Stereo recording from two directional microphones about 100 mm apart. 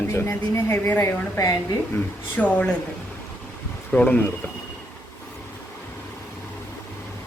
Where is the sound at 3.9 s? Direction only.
15° left (ahead or behind).